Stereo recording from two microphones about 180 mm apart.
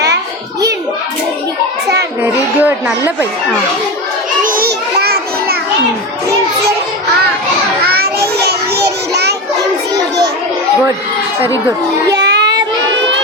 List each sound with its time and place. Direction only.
2.6 s speech: 10° right (ahead or behind)
4.4 s a sound: 55° right (ahead or behind)
7.9 s children playing: 60° right (ahead or behind)
8.4 s child singing: 65° right (ahead or behind)
12.1 s child singing: 70° right (ahead or behind)